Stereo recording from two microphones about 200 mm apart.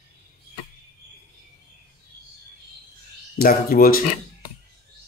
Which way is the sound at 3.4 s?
50° left (ahead or behind).